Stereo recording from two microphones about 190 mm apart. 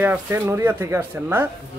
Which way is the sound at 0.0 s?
10° right (ahead or behind).